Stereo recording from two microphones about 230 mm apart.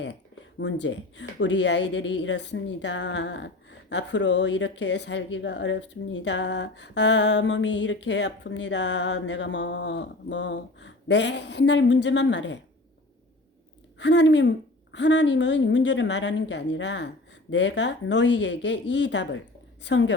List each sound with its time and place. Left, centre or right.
0.6 s speech: left
14.0 s speech: left